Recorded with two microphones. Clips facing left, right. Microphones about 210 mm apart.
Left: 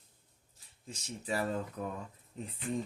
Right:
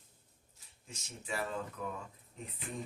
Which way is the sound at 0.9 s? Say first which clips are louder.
Left 5 dB; 35° left (ahead or behind).